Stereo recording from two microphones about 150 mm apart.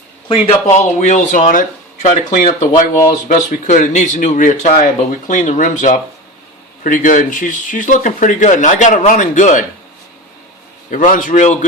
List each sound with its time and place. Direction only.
0.4 s speech: 50° left (ahead or behind)
10.9 s speech: 60° left (ahead or behind)